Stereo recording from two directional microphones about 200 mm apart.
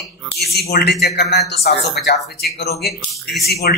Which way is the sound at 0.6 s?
55° left (ahead or behind).